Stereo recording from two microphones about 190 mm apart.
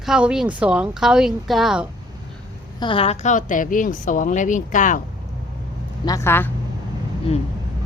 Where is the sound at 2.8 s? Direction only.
30° left (ahead or behind).